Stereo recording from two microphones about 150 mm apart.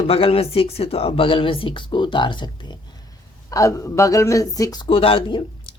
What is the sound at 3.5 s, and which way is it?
Speech, 20° left (ahead or behind).